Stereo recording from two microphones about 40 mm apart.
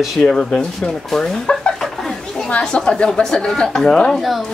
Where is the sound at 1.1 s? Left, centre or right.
Centre.